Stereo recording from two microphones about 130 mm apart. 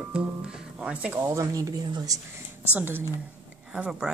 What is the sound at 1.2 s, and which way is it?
Speech, 25° right (ahead or behind).